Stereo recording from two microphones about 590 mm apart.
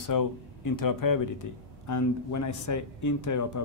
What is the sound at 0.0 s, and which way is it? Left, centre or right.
Speech, left.